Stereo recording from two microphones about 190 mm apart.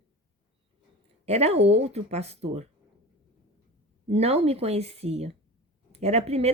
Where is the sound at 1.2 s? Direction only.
35° right (ahead or behind).